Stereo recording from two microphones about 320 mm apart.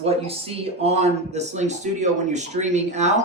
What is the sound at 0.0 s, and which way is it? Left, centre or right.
Speech, centre.